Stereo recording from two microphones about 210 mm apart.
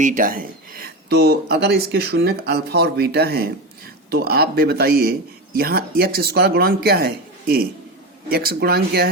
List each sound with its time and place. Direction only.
0.0 s speech: 40° right (ahead or behind)